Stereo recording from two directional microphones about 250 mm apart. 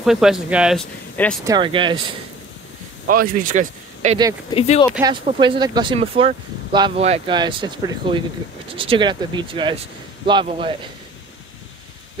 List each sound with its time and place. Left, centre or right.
0.0 s speech: centre
1.4 s speech: centre
3.1 s speech: right
4.5 s speech: left
5.0 s speech: centre